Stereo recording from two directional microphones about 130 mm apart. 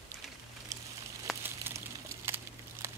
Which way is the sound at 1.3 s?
Centre (ahead or behind).